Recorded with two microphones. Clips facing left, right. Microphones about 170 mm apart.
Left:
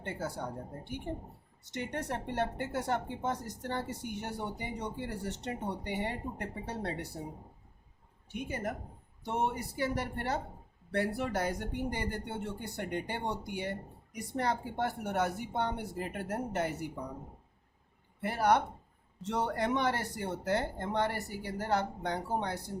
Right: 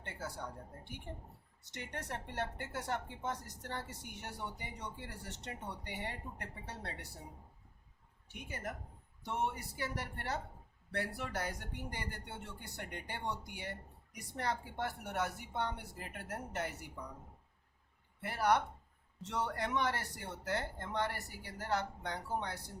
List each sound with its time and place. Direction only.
0.4 s speech: 25° left (ahead or behind)
8.3 s speech: 20° left (ahead or behind)
18.2 s speech: 25° left (ahead or behind)